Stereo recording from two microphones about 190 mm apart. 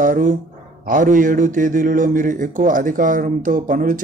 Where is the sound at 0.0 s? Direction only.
45° right (ahead or behind).